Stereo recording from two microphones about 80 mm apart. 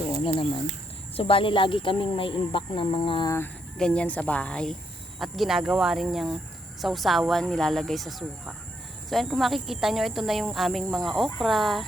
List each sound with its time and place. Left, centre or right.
0.1 s speech: left
3.8 s speech: centre
5.2 s speech: centre